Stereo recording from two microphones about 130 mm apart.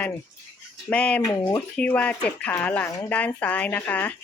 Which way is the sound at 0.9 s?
10° left (ahead or behind).